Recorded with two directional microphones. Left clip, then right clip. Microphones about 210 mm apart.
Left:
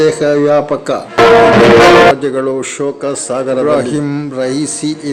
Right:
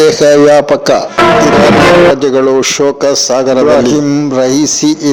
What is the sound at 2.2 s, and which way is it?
A man's voice, 30° right (ahead or behind).